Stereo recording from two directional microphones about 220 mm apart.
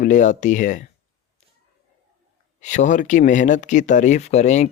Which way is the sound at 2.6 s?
35° left (ahead or behind).